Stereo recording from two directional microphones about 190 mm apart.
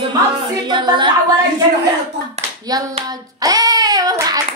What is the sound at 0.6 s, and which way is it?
Speech, 25° right (ahead or behind).